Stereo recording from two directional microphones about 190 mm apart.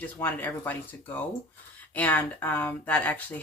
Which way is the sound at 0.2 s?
10° left (ahead or behind).